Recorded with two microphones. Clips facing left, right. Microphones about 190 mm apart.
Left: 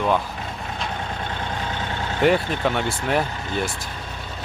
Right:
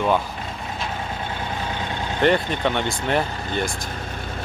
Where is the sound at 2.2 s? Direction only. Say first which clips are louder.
Even; 5° left (ahead or behind).